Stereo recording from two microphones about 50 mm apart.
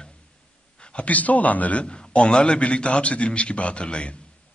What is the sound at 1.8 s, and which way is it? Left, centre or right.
A man's voice, centre.